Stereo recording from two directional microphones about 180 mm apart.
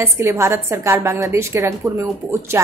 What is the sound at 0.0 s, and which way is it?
A woman's voice, 15° right (ahead or behind).